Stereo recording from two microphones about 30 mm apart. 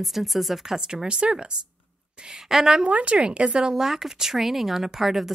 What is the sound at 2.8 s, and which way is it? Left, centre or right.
Speech, right.